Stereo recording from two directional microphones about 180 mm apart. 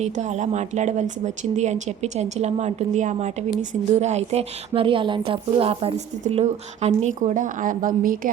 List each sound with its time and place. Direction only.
0.0 s a woman's voice: 40° right (ahead or behind)